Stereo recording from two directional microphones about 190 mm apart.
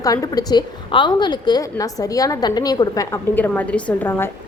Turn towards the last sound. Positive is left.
turn(degrees=10)  # may be behind; listen again after turning